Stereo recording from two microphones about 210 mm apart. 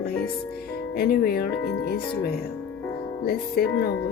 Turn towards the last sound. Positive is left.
turn(degrees=50)  # may be behind; listen again after turning